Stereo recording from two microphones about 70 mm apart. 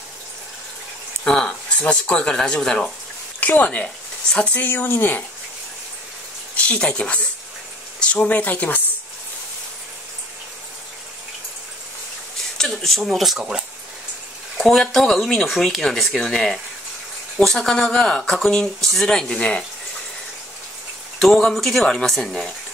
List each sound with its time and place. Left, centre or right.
1.2 s a sound: centre
1.8 s speech: centre
3.3 s speech: left
4.6 s speech: left
6.5 s speech: centre
12.5 s speech: centre
14.6 s speech: centre
21.2 s speech: centre